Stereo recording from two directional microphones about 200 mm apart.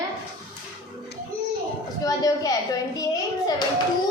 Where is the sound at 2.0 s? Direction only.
20° left (ahead or behind).